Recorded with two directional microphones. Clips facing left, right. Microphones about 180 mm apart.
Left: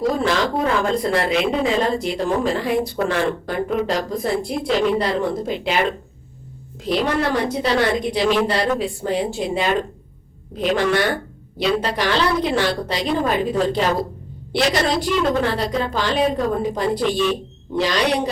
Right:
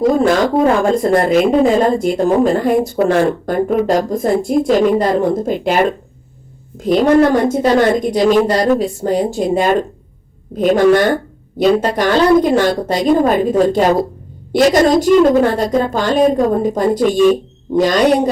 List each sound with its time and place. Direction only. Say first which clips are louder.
0.1 s a woman's voice: right 7 dB; 45° right (ahead or behind)